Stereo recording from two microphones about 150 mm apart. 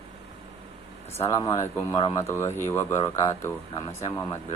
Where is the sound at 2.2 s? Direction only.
15° left (ahead or behind).